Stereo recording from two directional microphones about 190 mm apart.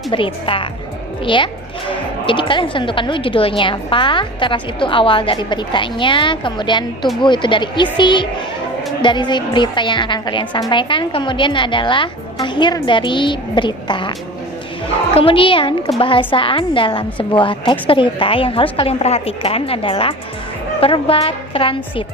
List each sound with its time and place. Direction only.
0.1 s speech: 25° left (ahead or behind)
15.1 s speech: 30° left (ahead or behind)